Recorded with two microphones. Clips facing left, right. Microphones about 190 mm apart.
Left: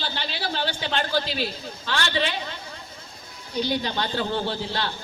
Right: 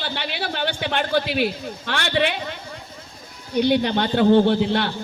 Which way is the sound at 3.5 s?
60° right (ahead or behind).